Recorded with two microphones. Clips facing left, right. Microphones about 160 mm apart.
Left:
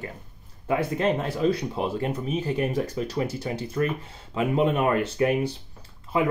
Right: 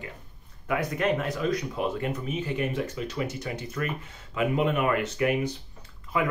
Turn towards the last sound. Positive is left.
turn(degrees=30)  # may be behind; listen again after turning